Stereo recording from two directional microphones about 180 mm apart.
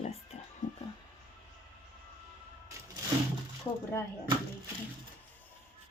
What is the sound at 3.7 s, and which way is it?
Speech, 15° left (ahead or behind).